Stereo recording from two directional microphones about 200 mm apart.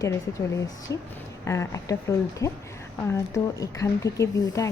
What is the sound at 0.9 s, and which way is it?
Speech, 15° left (ahead or behind).